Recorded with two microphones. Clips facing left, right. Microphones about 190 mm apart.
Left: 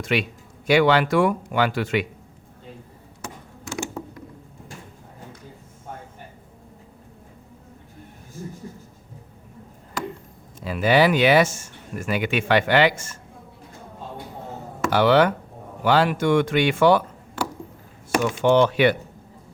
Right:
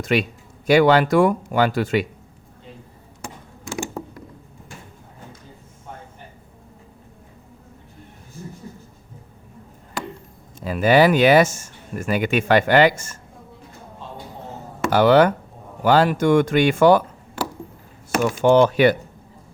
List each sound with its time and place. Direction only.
0.0 s speech: 45° right (ahead or behind)
10.6 s speech: 45° right (ahead or behind)
14.8 s speech: 45° right (ahead or behind)
18.2 s speech: 45° right (ahead or behind)